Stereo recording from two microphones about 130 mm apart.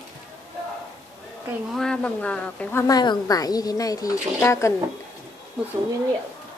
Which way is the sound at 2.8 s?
30° left (ahead or behind).